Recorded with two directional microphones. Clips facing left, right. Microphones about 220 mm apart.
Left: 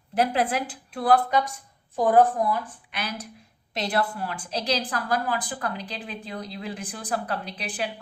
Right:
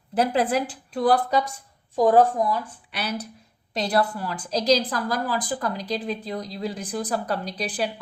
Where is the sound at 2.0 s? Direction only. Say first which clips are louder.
Right 2 dB; 30° right (ahead or behind).